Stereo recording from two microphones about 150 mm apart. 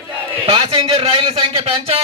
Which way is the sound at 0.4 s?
35° right (ahead or behind).